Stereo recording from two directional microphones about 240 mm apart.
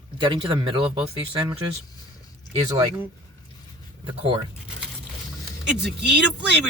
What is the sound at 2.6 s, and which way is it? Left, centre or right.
Speech, centre.